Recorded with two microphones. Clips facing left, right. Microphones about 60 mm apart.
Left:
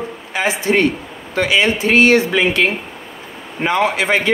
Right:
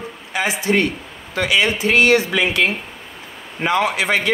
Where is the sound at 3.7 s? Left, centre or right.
Left.